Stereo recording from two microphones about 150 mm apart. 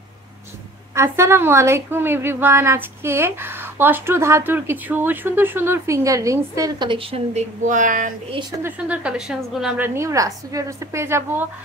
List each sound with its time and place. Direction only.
0.9 s a woman's voice: 20° right (ahead or behind)
7.3 s speech: 60° right (ahead or behind)
8.3 s a woman's voice: 30° right (ahead or behind)
8.6 s a woman's voice: 10° right (ahead or behind)
9.8 s a woman's voice: 20° right (ahead or behind)